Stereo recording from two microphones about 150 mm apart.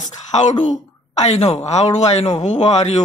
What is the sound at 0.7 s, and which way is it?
A woman's voice, 50° left (ahead or behind).